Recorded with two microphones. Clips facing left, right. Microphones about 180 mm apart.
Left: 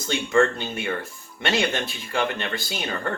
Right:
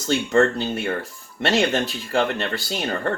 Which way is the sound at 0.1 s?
40° right (ahead or behind).